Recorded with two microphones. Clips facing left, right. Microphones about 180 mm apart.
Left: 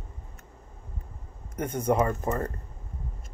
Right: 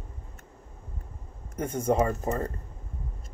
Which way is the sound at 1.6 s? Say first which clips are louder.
Even; 25° right (ahead or behind).